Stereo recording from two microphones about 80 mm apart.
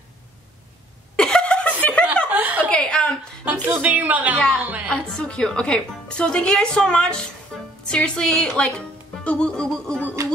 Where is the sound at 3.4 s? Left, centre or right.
Right.